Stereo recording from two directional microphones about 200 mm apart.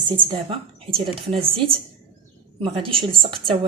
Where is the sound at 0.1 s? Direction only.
25° right (ahead or behind).